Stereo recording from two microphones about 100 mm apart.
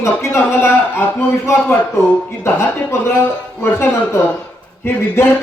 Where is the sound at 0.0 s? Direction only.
25° left (ahead or behind).